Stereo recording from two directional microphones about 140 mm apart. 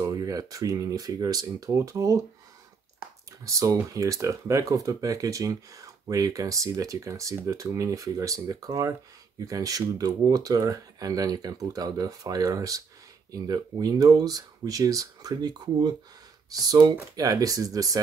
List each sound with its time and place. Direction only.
0.0 s speech: 25° right (ahead or behind)
3.4 s speech: 20° right (ahead or behind)